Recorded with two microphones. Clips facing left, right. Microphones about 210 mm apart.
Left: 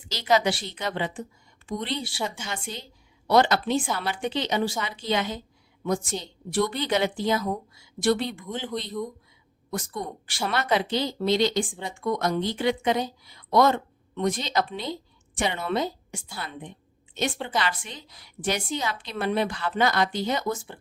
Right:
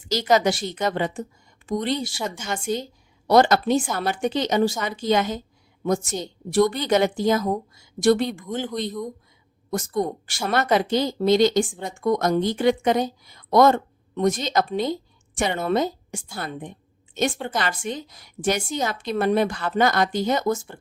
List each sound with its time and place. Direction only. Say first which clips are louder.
0.1 s a woman's voice: right 4 dB; 45° right (ahead or behind)
9.6 s speech: right 8 dB; 45° right (ahead or behind)